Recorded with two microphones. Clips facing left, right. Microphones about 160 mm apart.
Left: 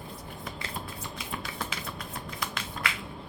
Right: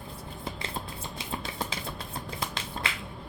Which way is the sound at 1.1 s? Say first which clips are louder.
Right 3 dB; 25° right (ahead or behind).